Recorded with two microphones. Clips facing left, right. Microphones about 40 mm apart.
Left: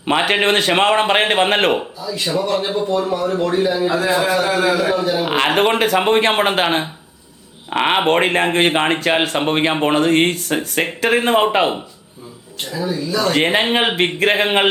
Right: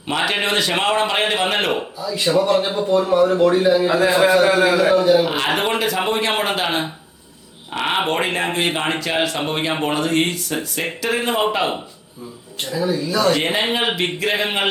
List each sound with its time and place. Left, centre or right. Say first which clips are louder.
0.1 s a man's voice: left 4 dB; left
1.8 s speech: right 2 dB; centre
5.2 s a man's voice: left 4 dB; left
12.6 s speech: right 1 dB; centre
13.3 s a man's voice: left 4 dB; left